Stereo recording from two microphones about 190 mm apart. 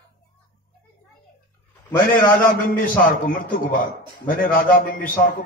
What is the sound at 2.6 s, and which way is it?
A man's voice, 45° left (ahead or behind).